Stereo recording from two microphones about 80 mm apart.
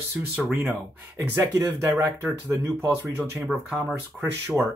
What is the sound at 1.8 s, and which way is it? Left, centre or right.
Speech, right.